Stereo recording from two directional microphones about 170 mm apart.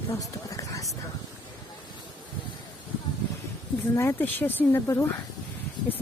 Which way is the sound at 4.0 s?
15° left (ahead or behind).